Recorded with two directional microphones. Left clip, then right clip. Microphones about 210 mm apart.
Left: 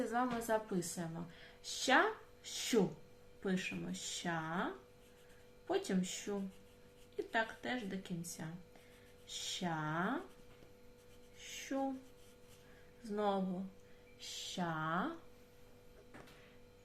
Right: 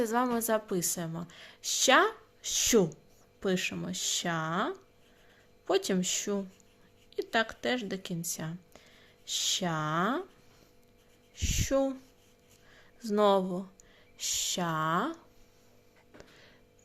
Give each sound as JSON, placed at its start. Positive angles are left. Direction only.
{"t": 0.0, "sound": "a woman's voice", "side_deg": -55}
{"t": 11.7, "sound": "a woman's voice", "side_deg": -55}
{"t": 13.1, "sound": "a woman's voice", "side_deg": -60}